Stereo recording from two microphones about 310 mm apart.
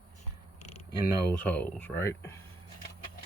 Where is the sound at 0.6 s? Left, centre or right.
Left.